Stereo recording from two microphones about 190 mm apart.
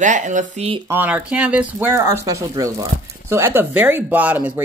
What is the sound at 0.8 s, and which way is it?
Speech, 10° right (ahead or behind).